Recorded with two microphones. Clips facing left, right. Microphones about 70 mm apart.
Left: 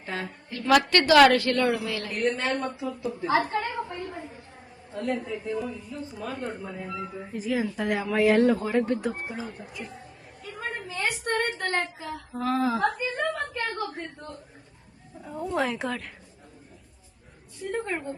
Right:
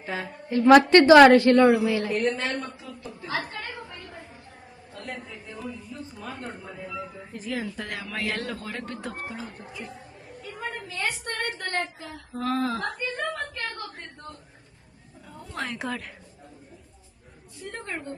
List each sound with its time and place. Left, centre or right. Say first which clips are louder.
0.0 s speech: right 1 dB; centre
0.5 s a woman's voice: right 7 dB; right
2.1 s speech: even; centre
3.1 s a sound: left 7 dB; left
5.0 s a woman's voice: left 10 dB; centre
9.6 s speech: even; centre
10.4 s a sound: even; centre
10.7 s a sound: left 1 dB; left
11.6 s speech: left 2 dB; centre
15.4 s speech: left 4 dB; centre
17.6 s a woman's voice: left 5 dB; centre